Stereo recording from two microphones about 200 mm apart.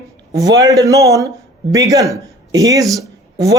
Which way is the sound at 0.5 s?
15° right (ahead or behind).